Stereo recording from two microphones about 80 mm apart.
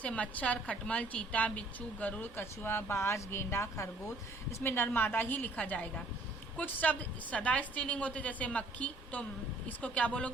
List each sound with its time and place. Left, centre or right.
0.0 s a woman's voice: centre